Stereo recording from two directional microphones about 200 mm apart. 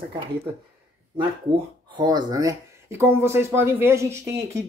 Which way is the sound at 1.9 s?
20° right (ahead or behind).